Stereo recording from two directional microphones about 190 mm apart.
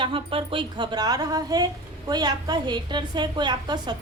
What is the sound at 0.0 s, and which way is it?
A woman's voice, 25° right (ahead or behind).